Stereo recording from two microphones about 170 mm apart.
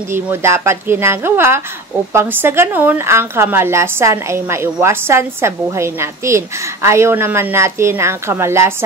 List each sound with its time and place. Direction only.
0.1 s speech: 15° right (ahead or behind)